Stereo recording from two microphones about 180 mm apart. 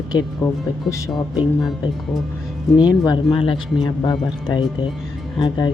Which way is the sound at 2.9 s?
25° left (ahead or behind).